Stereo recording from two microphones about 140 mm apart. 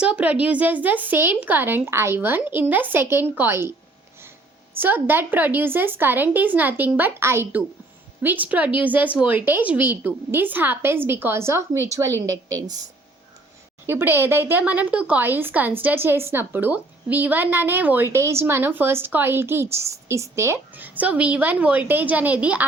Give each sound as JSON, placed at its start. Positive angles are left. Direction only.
{"t": 0.0, "sound": "speech", "side_deg": -10}
{"t": 4.8, "sound": "a woman's voice", "side_deg": -15}
{"t": 13.8, "sound": "speech", "side_deg": -15}